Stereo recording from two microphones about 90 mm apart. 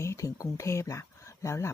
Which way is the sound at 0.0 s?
35° left (ahead or behind).